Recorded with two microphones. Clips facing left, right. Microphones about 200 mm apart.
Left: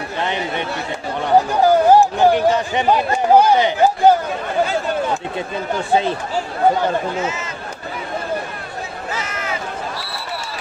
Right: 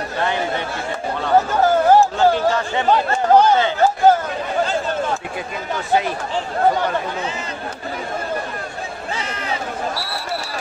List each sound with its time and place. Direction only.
0.2 s speech: 20° left (ahead or behind)
1.2 s a sound: 15° left (ahead or behind)
5.9 s speech: 25° left (ahead or behind)
9.1 s run: 30° right (ahead or behind)